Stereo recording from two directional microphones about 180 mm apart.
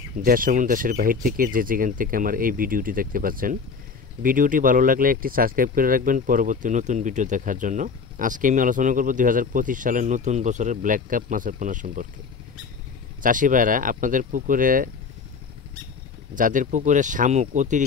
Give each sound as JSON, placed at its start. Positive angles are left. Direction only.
{"t": 0.2, "sound": "speech", "side_deg": -50}
{"t": 13.2, "sound": "speech", "side_deg": -45}
{"t": 16.3, "sound": "speech", "side_deg": -45}